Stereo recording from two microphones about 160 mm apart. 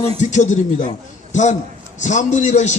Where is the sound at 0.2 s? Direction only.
50° left (ahead or behind).